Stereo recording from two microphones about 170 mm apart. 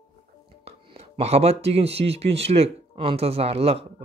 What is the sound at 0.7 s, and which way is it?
Speech, 35° right (ahead or behind).